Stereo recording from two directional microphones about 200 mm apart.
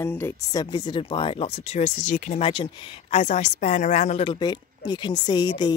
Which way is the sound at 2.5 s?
25° left (ahead or behind).